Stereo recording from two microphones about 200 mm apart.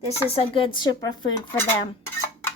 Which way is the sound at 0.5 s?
25° left (ahead or behind).